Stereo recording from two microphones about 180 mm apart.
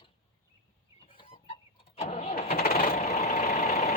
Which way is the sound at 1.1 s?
25° left (ahead or behind).